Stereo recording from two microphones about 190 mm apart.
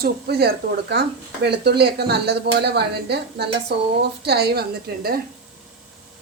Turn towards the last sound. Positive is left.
turn(degrees=-55)  # may be behind; listen again after turning